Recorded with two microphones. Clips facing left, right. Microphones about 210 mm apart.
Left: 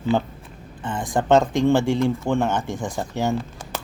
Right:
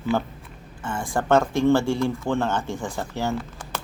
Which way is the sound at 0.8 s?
20° left (ahead or behind).